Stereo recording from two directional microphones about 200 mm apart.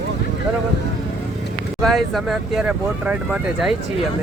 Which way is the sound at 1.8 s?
Centre (ahead or behind).